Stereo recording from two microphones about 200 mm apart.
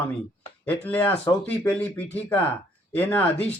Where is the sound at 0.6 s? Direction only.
10° left (ahead or behind).